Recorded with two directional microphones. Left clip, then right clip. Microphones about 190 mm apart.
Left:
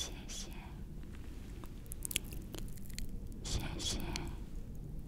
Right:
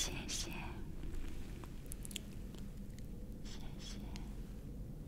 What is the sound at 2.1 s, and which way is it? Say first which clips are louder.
Biting: left 8 dB; 35° left (ahead or behind).